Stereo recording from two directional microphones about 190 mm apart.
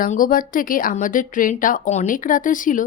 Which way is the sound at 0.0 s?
45° left (ahead or behind).